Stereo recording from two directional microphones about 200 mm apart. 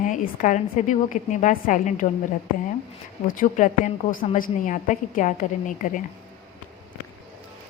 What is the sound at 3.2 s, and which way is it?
Speech, 40° left (ahead or behind).